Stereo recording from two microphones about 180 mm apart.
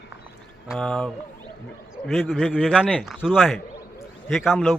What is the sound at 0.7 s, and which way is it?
A man's voice, 5° left (ahead or behind).